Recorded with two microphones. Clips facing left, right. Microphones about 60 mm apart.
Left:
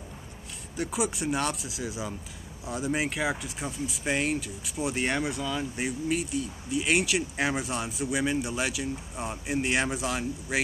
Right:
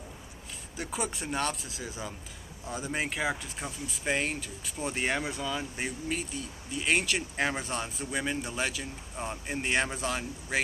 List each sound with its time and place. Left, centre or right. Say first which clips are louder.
0.7 s speech: left 5 dB; centre